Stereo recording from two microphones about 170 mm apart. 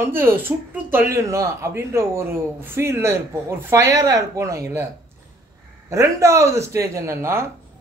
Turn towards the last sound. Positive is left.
turn(degrees=-15)  # may be behind; listen again after turning